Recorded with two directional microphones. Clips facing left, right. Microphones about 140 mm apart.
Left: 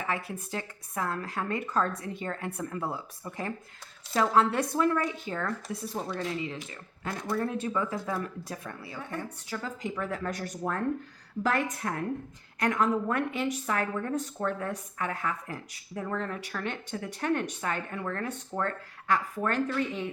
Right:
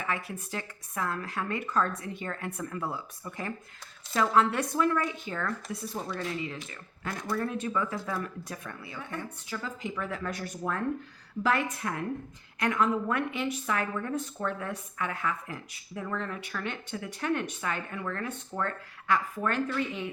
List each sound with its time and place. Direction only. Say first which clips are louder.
0.0 s a woman's voice: left 1 dB; 30° left (ahead or behind)